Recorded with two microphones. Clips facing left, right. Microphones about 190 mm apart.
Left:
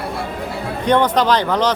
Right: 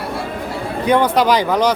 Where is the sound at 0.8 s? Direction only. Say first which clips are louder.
Right 1 dB; 10° right (ahead or behind).